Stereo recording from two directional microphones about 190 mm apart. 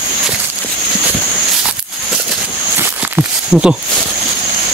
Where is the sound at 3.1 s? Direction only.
5° right (ahead or behind).